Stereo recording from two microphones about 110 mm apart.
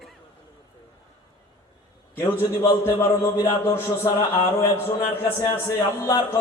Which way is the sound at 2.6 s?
30° left (ahead or behind).